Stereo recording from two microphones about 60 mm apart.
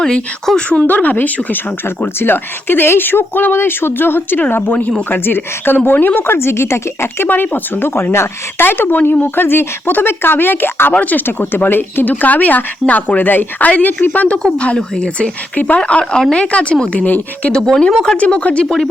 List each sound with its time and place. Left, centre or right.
0.0 s speech: centre
0.8 s a woman's voice: left
7.3 s a woman's voice: left
14.3 s speech: centre